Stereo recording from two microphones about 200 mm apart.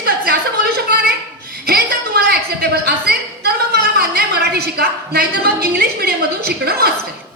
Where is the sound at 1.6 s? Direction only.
50° right (ahead or behind).